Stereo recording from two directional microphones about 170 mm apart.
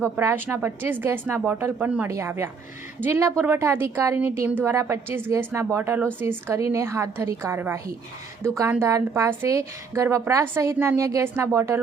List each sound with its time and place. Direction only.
0.0 s a woman's voice: 15° right (ahead or behind)